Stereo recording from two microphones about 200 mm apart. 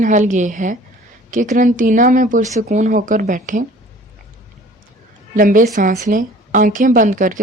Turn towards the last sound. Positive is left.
turn(degrees=-40)  # may be behind; listen again after turning